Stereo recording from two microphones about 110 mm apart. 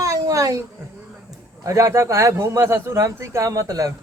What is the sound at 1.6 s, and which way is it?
Speech, 30° right (ahead or behind).